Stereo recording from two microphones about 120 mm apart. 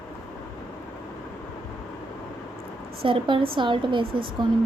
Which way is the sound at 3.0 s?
45° right (ahead or behind).